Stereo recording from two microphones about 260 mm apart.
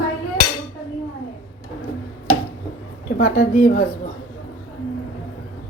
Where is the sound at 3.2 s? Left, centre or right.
Left.